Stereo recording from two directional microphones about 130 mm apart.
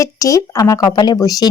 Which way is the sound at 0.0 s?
25° left (ahead or behind).